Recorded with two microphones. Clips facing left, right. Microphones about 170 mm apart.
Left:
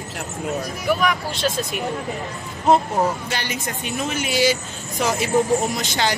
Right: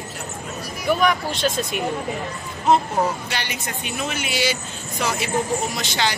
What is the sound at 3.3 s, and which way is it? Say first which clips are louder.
Speech: left 2 dB; 40° left (ahead or behind).